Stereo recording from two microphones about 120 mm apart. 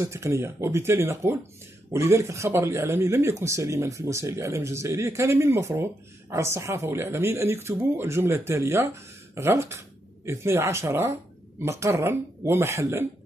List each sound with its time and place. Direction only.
0.0 s speech: 25° right (ahead or behind)